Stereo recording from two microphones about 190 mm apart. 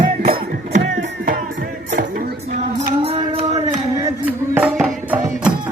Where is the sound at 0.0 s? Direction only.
50° right (ahead or behind).